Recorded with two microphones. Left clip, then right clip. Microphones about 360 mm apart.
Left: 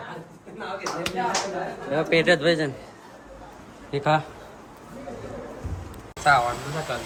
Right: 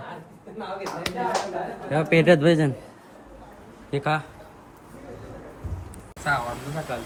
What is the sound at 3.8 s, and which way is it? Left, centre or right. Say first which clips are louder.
Speech: left 3 dB; centre.